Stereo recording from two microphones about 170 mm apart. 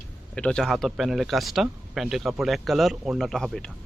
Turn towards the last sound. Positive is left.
turn(degrees=5)  # may be behind; listen again after turning